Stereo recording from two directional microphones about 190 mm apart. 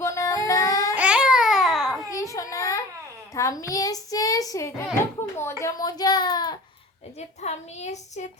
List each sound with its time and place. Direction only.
0.0 s yodeling: 15° left (ahead or behind)
0.9 s babbling: 5° right (ahead or behind)
2.0 s child singing: 15° left (ahead or behind)
5.4 s a sound: 15° left (ahead or behind)
7.2 s a woman's voice: 35° left (ahead or behind)